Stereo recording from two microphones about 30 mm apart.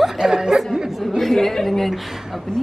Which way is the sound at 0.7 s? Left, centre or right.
Centre.